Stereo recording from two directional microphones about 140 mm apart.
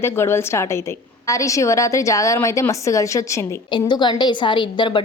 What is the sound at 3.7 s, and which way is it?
A woman's voice, 30° left (ahead or behind).